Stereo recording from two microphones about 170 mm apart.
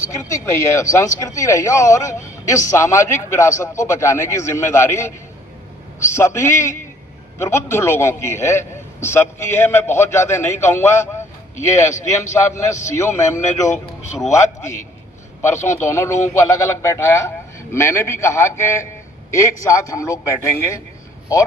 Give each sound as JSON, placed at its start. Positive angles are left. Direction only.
{"t": 0.1, "sound": "a man's voice", "side_deg": 20}
{"t": 12.0, "sound": "a man's voice", "side_deg": 15}
{"t": 15.4, "sound": "a man's voice", "side_deg": 15}